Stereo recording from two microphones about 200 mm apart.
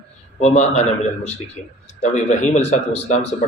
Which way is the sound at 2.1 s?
35° left (ahead or behind).